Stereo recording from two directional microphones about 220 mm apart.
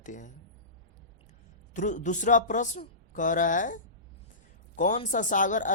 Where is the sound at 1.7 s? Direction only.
35° left (ahead or behind).